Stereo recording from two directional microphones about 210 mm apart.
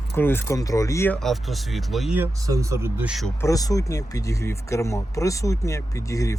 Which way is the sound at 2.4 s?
15° right (ahead or behind).